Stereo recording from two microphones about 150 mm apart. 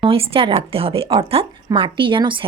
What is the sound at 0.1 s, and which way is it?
A woman's voice, 35° right (ahead or behind).